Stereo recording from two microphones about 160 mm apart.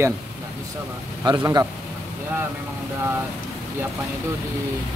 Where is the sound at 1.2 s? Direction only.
25° right (ahead or behind).